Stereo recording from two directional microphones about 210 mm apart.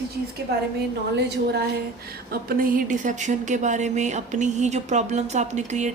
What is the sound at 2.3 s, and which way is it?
Speech, 45° right (ahead or behind).